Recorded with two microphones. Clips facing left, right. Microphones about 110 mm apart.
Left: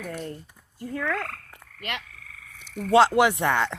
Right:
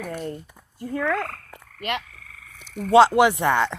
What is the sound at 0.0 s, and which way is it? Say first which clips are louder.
A woman's voice: right 3 dB; 25° right (ahead or behind).